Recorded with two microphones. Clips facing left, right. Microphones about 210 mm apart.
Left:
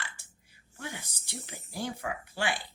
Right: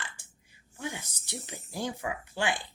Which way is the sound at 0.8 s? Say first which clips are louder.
Right 4 dB; 15° right (ahead or behind).